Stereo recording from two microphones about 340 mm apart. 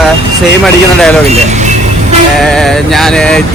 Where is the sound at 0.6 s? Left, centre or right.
Centre.